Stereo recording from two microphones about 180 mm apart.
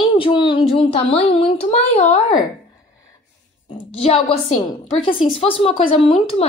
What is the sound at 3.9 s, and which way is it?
A woman's voice, 30° left (ahead or behind).